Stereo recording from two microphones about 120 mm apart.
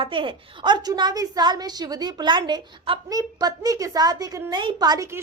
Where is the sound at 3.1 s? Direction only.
30° right (ahead or behind).